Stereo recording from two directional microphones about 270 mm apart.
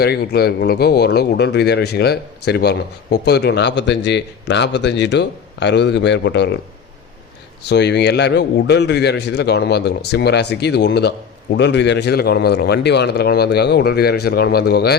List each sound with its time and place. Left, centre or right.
0.0 s speech: left
7.6 s speech: left